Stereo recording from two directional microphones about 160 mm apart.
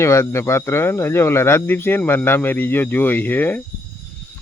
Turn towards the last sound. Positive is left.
turn(degrees=10)  # may be behind; listen again after turning